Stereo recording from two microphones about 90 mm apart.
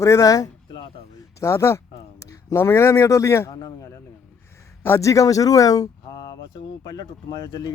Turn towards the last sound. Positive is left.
turn(degrees=45)  # may be behind; listen again after turning